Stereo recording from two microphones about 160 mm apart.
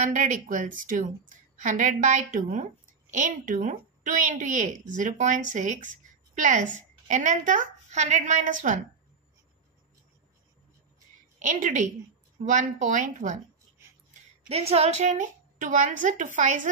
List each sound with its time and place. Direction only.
0.0 s a woman's voice: 55° right (ahead or behind)
11.3 s a woman's voice: 50° right (ahead or behind)
14.5 s a woman's voice: 40° right (ahead or behind)